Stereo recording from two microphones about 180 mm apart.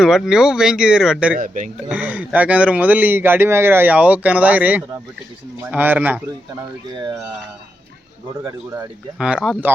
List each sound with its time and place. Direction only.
0.0 s speech: centre (ahead or behind)
1.4 s a man's voice: 45° right (ahead or behind)
1.9 s speech: 10° right (ahead or behind)
8.4 s speech: 15° right (ahead or behind)
9.1 s speech: 5° right (ahead or behind)